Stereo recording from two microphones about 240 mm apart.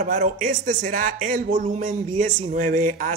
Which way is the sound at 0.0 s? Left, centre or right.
Right.